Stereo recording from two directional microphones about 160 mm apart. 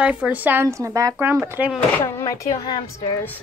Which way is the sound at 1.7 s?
15° left (ahead or behind).